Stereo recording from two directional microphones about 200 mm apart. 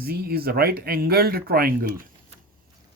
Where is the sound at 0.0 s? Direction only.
50° right (ahead or behind).